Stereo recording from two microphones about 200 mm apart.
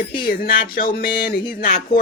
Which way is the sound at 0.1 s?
45° left (ahead or behind).